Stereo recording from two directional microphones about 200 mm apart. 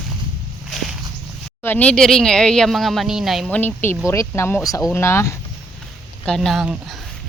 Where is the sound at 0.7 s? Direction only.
Centre (ahead or behind).